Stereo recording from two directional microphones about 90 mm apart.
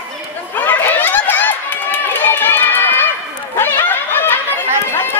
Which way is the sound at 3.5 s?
25° left (ahead or behind).